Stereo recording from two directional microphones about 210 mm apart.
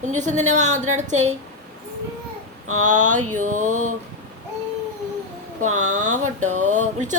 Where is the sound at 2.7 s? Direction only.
35° right (ahead or behind).